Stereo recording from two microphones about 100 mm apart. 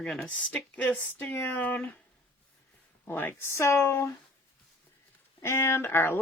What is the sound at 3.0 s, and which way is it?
Speech, 20° left (ahead or behind).